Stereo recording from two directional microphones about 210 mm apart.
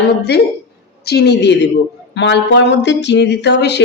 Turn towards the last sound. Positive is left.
turn(degrees=55)  # may be behind; listen again after turning